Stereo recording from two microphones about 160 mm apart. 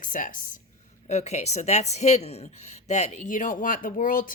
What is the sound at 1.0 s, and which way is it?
Speech, 45° left (ahead or behind).